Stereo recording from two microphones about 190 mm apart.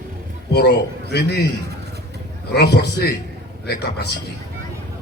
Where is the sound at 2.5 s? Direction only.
60° left (ahead or behind).